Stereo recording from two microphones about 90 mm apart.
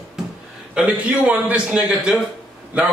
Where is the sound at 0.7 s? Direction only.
15° right (ahead or behind).